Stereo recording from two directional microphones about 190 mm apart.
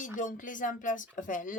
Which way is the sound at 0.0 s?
40° left (ahead or behind).